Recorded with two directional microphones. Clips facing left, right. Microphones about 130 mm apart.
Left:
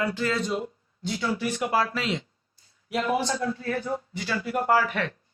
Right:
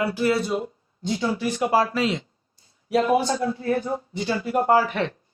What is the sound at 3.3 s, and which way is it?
Speech, 25° right (ahead or behind).